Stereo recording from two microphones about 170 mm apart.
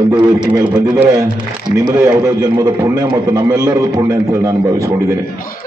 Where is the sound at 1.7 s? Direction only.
20° right (ahead or behind).